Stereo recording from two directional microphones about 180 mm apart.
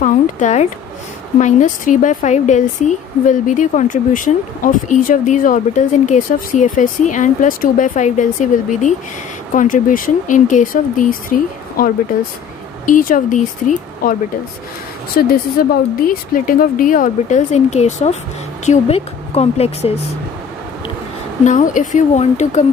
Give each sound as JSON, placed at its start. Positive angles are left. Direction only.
{"t": 0.0, "sound": "speech", "side_deg": 40}
{"t": 15.2, "sound": "speech", "side_deg": 50}
{"t": 21.5, "sound": "speech", "side_deg": 45}